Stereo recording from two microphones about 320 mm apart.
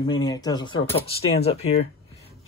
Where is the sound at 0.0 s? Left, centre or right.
Centre.